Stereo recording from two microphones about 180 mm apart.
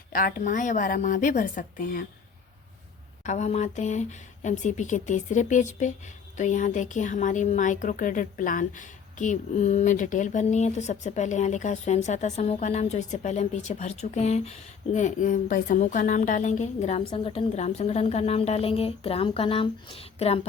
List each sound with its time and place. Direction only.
0.1 s a woman's voice: 50° left (ahead or behind)
3.2 s a woman's voice: 40° left (ahead or behind)